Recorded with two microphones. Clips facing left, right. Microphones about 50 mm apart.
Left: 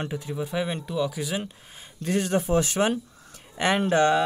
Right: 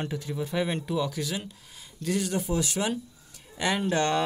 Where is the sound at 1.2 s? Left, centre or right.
Left.